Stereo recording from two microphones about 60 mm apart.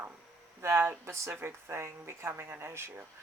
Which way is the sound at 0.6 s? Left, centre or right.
Right.